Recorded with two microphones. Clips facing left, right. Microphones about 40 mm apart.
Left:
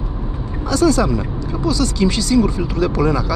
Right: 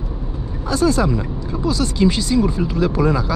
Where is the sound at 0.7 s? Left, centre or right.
Right.